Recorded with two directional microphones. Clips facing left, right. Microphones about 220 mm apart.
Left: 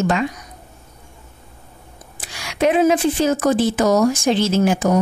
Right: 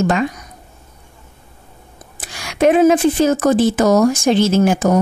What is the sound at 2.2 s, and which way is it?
Speech, 45° right (ahead or behind).